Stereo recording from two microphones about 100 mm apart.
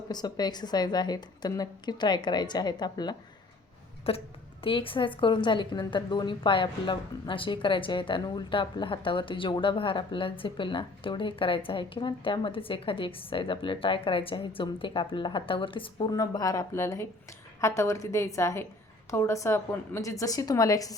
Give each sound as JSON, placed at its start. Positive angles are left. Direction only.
{"t": 0.1, "sound": "a woman's voice", "side_deg": 45}
{"t": 4.1, "sound": "a woman's voice", "side_deg": 75}
{"t": 4.6, "sound": "a woman's voice", "side_deg": 60}
{"t": 16.0, "sound": "a woman's voice", "side_deg": 40}